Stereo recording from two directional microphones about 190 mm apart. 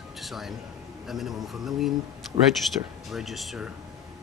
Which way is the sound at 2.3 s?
30° right (ahead or behind).